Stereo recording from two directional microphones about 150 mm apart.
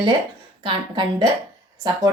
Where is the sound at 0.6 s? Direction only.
30° right (ahead or behind).